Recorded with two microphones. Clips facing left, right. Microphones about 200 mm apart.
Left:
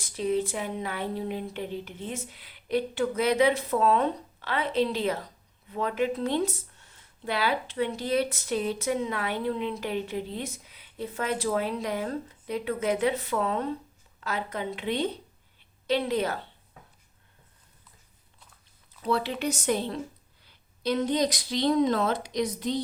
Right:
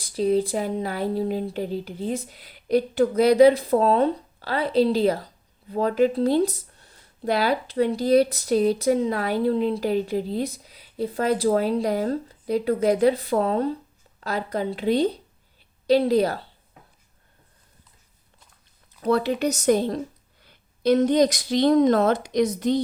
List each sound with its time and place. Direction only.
0.0 s speech: 35° right (ahead or behind)
19.0 s a woman's voice: 45° right (ahead or behind)